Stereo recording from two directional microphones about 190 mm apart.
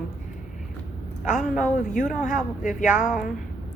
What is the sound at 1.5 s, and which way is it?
Speech, 45° left (ahead or behind).